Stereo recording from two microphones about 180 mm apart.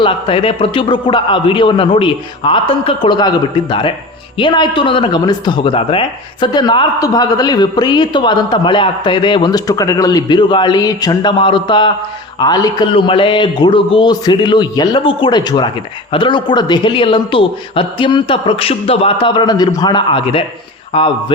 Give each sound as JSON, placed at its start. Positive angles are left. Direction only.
{"t": 0.0, "sound": "speech", "side_deg": 30}